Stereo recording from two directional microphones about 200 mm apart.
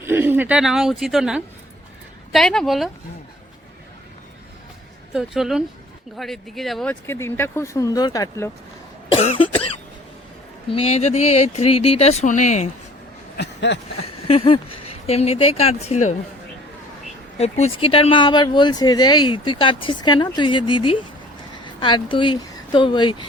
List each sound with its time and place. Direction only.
0.0 s speech: 10° right (ahead or behind)
5.1 s speech: centre (ahead or behind)
7.1 s speech: 10° left (ahead or behind)
9.1 s speech: 30° left (ahead or behind)
10.7 s speech: 30° left (ahead or behind)
13.3 s a sound: 60° left (ahead or behind)
14.0 s speech: 30° left (ahead or behind)
17.3 s speech: 30° left (ahead or behind)